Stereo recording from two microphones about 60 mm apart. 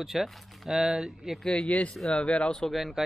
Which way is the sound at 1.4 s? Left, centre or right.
Centre.